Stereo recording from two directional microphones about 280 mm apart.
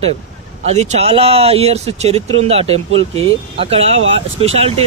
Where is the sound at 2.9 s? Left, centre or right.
Right.